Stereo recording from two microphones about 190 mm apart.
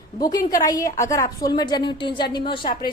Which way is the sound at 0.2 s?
20° left (ahead or behind).